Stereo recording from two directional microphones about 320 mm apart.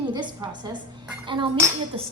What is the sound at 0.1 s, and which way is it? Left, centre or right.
A woman's voice, centre.